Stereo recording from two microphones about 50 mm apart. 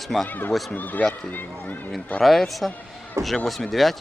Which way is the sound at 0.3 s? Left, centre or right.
Left.